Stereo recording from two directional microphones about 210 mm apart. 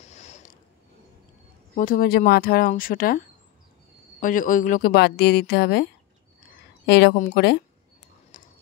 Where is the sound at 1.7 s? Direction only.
40° left (ahead or behind).